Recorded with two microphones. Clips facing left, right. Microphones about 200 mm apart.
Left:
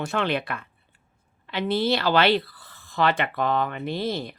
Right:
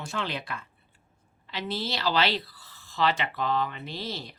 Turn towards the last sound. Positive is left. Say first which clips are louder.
# left 9 dB
turn(degrees=55)  # may be behind; listen again after turning